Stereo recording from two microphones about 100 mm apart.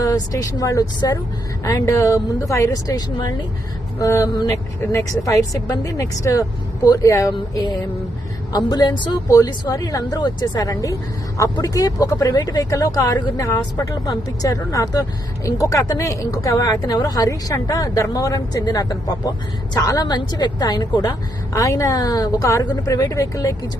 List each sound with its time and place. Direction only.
0.0 s a woman's voice: 35° left (ahead or behind)
4.0 s speech: 30° left (ahead or behind)
8.5 s a woman's voice: 40° left (ahead or behind)
13.9 s speech: 40° left (ahead or behind)